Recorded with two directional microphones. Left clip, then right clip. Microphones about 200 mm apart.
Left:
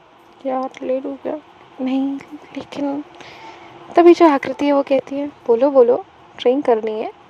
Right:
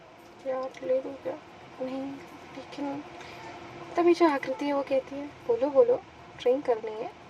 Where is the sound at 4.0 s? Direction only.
45° left (ahead or behind).